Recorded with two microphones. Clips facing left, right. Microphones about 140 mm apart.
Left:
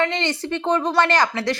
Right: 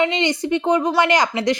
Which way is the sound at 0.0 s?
15° right (ahead or behind).